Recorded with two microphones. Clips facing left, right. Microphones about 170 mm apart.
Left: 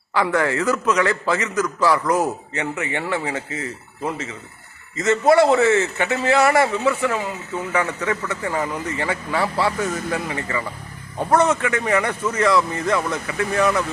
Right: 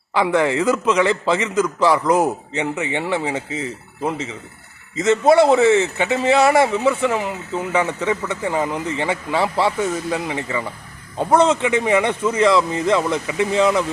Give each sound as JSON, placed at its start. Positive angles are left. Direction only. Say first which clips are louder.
{"t": 0.1, "sound": "speech", "louder": "right 2 dB", "side_deg": -20}